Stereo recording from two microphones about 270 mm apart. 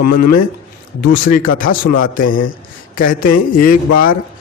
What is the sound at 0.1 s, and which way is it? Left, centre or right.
Speech, left.